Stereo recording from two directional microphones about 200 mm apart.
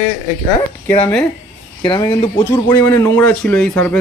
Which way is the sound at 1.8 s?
20° left (ahead or behind).